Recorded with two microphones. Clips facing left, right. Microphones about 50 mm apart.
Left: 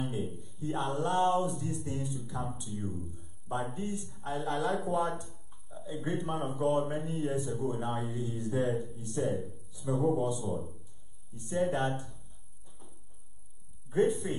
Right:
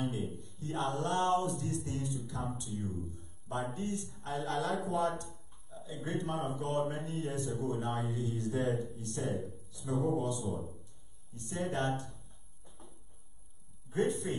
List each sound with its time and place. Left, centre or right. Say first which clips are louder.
0.0 s a sound: left 1 dB; centre
0.3 s a man's voice: left 4 dB; centre
9.0 s speech: left 5 dB; left
9.8 s speech: left 3 dB; centre
11.4 s speech: left 5 dB; centre
13.9 s speech: left 4 dB; centre